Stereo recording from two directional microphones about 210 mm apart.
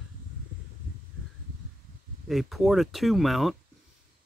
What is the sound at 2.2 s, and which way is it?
Speech, centre (ahead or behind).